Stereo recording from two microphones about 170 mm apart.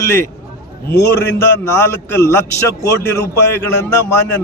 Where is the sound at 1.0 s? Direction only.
90° left.